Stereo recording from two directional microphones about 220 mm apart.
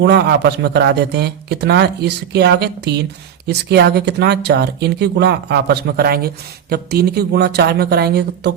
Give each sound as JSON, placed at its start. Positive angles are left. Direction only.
{"t": 0.0, "sound": "speech", "side_deg": -50}